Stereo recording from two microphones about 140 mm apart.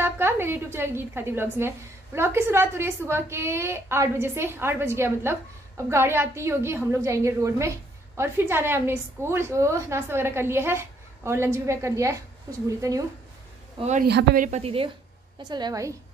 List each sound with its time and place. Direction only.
0.0 s a woman's voice: 15° right (ahead or behind)
13.8 s a woman's voice: 65° right (ahead or behind)
14.6 s a woman's voice: 40° right (ahead or behind)
15.3 s a woman's voice: 30° right (ahead or behind)